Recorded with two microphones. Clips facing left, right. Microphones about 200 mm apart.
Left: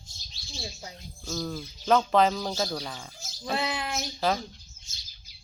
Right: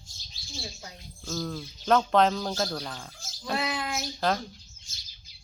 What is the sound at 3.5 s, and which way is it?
Bird, 25° left (ahead or behind).